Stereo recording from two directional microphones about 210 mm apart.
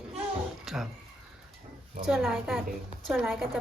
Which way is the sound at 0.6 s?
Centre (ahead or behind).